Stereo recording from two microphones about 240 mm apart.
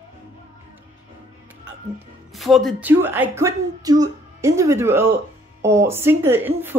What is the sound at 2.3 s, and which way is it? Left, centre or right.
Speech, centre.